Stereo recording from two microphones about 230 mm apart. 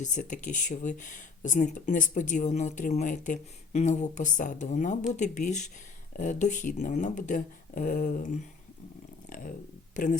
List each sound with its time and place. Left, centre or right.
0.0 s speech: left